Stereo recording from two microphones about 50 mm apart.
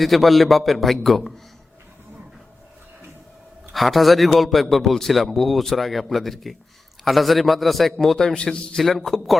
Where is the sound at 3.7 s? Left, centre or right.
Centre.